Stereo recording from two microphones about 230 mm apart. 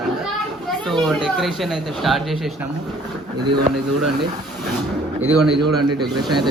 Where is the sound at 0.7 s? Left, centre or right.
Centre.